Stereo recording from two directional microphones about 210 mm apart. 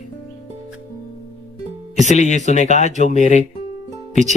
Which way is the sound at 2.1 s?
35° left (ahead or behind).